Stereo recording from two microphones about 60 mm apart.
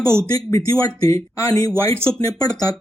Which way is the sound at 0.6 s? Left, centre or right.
Left.